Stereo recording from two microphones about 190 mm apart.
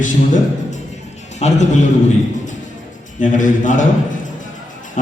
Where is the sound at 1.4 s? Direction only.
35° left (ahead or behind).